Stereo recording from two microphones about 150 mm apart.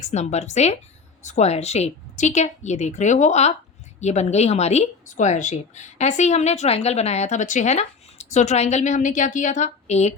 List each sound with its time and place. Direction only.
0.0 s speech: 50° left (ahead or behind)